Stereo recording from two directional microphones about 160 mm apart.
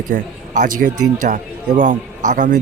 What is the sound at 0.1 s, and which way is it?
A man's voice, 60° right (ahead or behind).